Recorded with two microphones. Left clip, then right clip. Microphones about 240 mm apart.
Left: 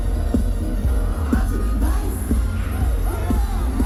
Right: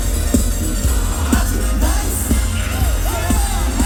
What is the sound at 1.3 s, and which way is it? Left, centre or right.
Music, right.